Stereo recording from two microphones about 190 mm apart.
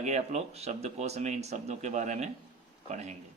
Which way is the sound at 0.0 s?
40° right (ahead or behind).